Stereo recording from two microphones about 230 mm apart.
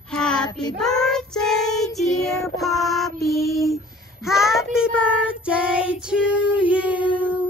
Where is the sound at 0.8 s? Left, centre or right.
Centre.